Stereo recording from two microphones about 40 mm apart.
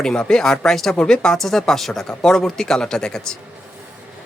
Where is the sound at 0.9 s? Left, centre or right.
Left.